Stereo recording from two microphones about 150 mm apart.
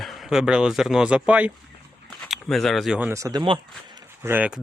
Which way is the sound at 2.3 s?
Centre (ahead or behind).